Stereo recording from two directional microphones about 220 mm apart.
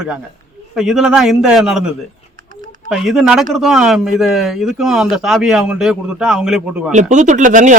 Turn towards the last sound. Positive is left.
turn(degrees=-35)  # may be behind; listen again after turning